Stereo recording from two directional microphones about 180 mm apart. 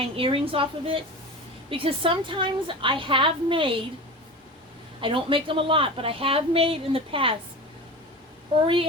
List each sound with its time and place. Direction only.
0.0 s a woman's voice: 30° right (ahead or behind)
4.9 s a woman's voice: 30° right (ahead or behind)
8.6 s a woman's voice: 30° right (ahead or behind)